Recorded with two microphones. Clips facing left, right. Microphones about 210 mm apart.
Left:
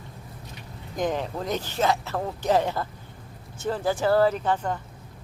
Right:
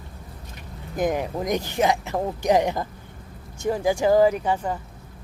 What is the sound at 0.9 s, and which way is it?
Speech, 10° right (ahead or behind).